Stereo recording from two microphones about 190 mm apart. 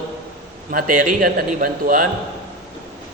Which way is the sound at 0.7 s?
45° right (ahead or behind).